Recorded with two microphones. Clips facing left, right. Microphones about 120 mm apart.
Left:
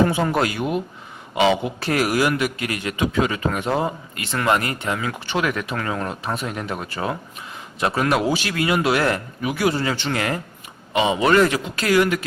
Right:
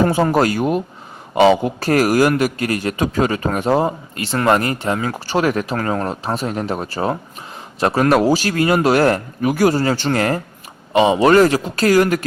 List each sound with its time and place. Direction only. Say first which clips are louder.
0.0 s a man's voice: right 4 dB; 40° right (ahead or behind)